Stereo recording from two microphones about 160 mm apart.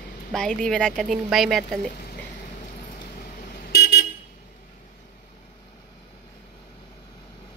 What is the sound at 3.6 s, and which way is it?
Vehicle, 75° left (ahead or behind).